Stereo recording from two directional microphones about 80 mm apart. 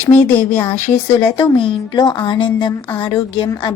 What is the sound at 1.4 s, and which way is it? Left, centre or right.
A woman's voice, left.